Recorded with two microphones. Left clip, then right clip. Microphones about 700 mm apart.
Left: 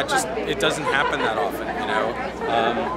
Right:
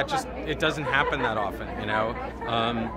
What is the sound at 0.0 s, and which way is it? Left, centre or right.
Speech, right.